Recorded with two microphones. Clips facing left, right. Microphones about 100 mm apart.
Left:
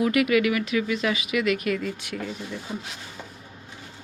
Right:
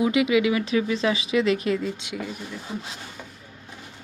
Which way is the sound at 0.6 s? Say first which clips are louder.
Right 2 dB; 30° right (ahead or behind).